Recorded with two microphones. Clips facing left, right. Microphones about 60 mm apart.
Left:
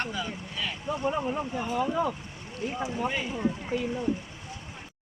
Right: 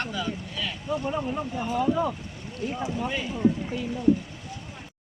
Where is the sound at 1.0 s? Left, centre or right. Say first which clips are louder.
Even; centre.